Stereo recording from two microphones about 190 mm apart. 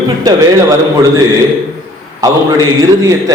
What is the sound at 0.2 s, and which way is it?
Speech, 20° right (ahead or behind).